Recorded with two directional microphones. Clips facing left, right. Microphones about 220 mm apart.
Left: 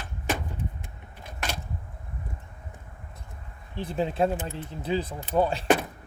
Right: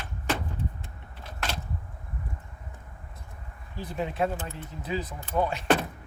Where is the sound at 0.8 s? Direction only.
15° left (ahead or behind).